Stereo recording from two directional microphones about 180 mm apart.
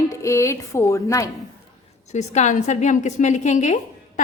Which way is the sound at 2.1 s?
40° left (ahead or behind).